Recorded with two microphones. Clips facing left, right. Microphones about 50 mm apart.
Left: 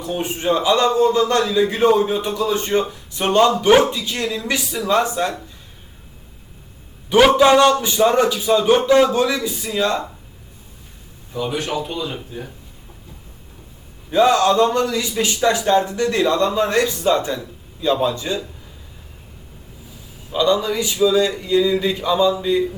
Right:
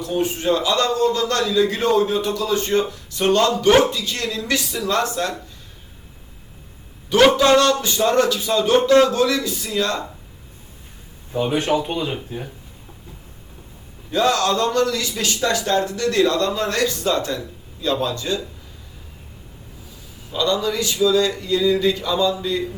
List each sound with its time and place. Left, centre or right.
0.0 s a man's voice: centre
7.3 s a man's voice: centre
11.3 s speech: right
14.1 s a man's voice: centre
20.3 s a man's voice: centre